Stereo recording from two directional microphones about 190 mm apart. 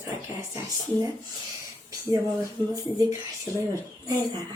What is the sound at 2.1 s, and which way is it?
Speech, 15° right (ahead or behind).